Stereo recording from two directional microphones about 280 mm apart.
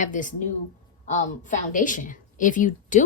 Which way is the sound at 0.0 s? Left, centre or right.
Left.